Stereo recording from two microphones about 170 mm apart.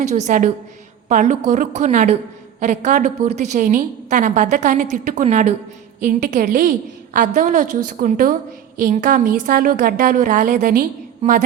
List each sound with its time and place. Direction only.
0.0 s a woman's voice: 45° right (ahead or behind)